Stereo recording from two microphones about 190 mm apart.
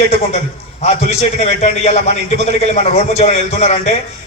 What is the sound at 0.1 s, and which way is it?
A man's voice, 35° left (ahead or behind).